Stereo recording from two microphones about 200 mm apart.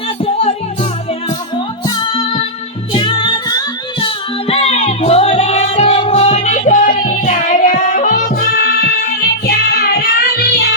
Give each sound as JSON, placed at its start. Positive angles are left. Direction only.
{"t": 1.9, "sound": "music", "side_deg": 25}